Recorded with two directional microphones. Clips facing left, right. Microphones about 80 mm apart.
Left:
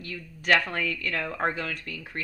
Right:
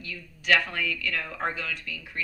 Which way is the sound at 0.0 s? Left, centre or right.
Left.